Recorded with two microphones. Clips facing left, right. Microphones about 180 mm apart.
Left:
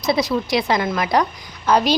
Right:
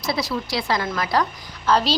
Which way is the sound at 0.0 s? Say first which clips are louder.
Left 6 dB; 20° left (ahead or behind).